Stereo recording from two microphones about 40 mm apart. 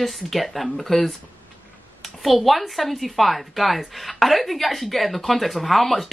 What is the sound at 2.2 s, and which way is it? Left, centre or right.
Speech, centre.